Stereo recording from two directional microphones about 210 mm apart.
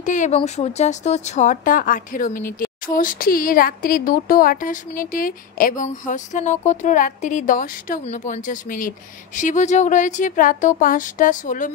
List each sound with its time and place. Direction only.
0.0 s speech: 35° left (ahead or behind)